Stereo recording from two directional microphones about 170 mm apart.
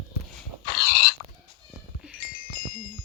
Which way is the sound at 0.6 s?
65° left (ahead or behind).